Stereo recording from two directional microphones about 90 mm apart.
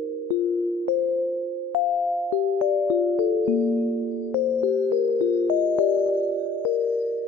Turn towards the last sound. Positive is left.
turn(degrees=15)  # may be behind; listen again after turning